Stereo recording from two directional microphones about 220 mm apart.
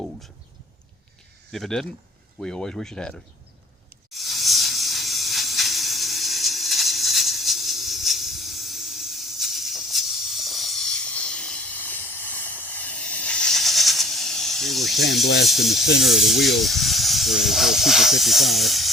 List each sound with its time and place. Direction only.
1.5 s speech: centre (ahead or behind)
4.1 s hiss: centre (ahead or behind)
15.4 s speech: centre (ahead or behind)